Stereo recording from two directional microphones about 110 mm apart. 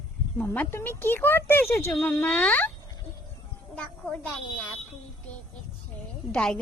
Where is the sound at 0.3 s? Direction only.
10° left (ahead or behind).